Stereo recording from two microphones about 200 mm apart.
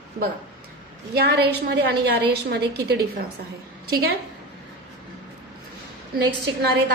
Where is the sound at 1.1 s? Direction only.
55° right (ahead or behind).